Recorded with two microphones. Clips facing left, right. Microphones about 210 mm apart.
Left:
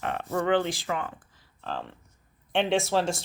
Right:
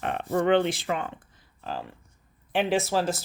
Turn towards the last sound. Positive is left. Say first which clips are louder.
# even
turn(degrees=0)  # may be behind; listen again after turning